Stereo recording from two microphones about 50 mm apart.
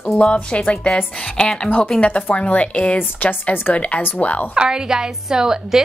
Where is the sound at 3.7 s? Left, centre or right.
Left.